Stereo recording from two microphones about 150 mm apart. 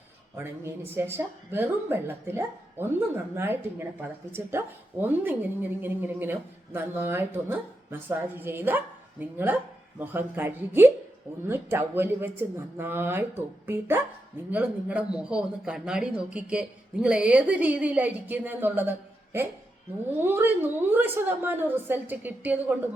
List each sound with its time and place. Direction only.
0.3 s speech: 15° right (ahead or behind)